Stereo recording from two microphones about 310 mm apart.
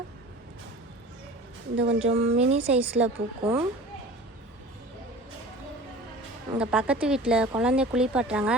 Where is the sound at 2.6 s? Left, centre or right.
Centre.